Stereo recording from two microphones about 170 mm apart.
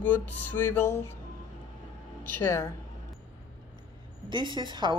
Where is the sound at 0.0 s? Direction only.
10° left (ahead or behind).